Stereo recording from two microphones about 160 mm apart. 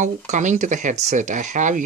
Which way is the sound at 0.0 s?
50° right (ahead or behind).